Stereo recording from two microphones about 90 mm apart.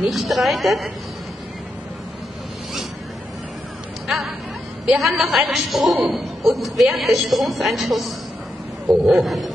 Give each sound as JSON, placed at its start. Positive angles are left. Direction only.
{"t": 0.0, "sound": "a woman's voice", "side_deg": 0}
{"t": 4.8, "sound": "a woman's voice", "side_deg": 0}